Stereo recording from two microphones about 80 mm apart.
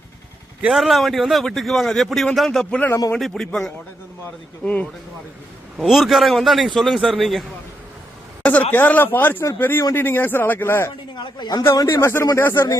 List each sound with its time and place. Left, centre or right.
0.7 s a man's voice: centre
4.6 s a man's voice: centre
5.7 s a man's voice: centre
8.4 s speech: left
11.1 s speech: left
11.9 s speech: left
12.4 s speech: left